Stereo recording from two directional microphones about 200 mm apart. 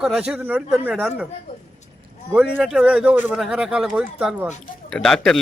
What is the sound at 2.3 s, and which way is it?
Speech, centre (ahead or behind).